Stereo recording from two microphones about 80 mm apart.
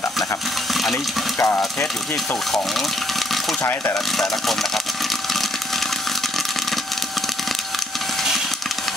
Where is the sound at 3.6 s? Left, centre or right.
Left.